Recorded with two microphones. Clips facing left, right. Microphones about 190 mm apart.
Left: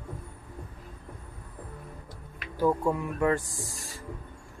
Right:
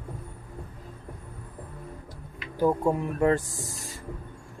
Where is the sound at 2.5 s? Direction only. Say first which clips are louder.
Right 2 dB; 20° right (ahead or behind).